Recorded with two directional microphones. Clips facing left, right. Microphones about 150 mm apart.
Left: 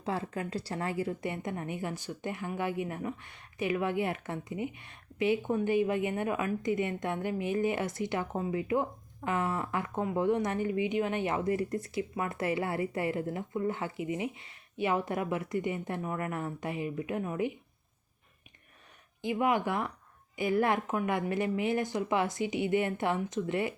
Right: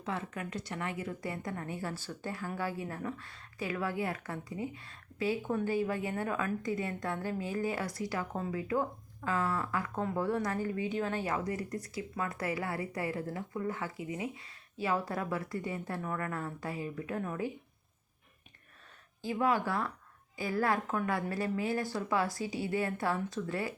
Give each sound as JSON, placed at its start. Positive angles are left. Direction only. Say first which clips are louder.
{"t": 0.0, "sound": "a woman's voice", "louder": "left 4 dB", "side_deg": 30}
{"t": 19.2, "sound": "a woman's voice", "louder": "left 2 dB", "side_deg": 20}